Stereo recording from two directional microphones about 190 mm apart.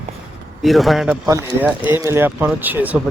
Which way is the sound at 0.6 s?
Centre (ahead or behind).